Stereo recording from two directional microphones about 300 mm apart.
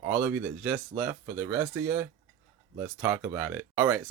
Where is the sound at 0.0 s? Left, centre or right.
Centre.